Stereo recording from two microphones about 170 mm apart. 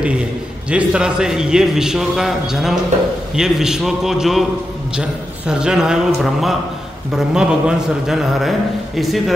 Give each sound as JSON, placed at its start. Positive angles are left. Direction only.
{"t": 0.7, "sound": "a man's voice", "side_deg": -5}
{"t": 5.5, "sound": "a man's voice", "side_deg": -5}